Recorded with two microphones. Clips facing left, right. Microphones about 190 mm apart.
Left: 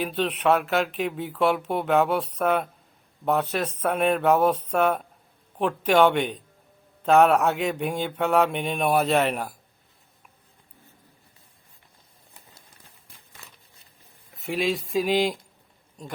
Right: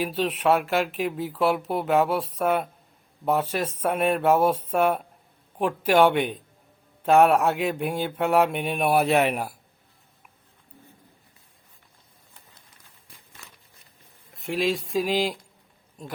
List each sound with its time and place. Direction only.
0.0 s speech: 5° right (ahead or behind)
14.3 s speech: centre (ahead or behind)